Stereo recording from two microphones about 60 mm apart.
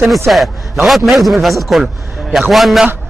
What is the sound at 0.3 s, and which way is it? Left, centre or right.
A man's voice, centre.